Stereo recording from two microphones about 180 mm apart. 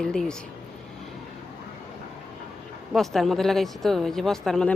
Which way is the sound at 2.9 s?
Centre (ahead or behind).